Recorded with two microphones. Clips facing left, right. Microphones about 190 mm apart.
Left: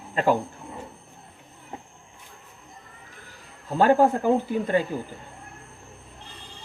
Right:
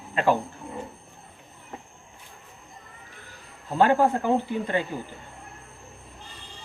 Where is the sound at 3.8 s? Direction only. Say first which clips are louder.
Left 2 dB; 40° left (ahead or behind).